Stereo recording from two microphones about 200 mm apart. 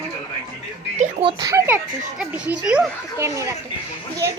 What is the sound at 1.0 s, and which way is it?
Speech, 30° right (ahead or behind).